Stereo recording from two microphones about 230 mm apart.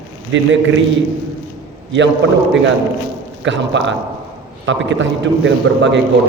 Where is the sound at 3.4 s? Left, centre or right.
Right.